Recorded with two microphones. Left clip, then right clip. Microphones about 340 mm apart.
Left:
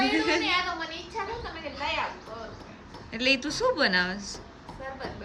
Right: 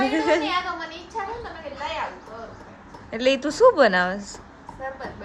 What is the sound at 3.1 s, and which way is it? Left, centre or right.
A woman's voice, centre.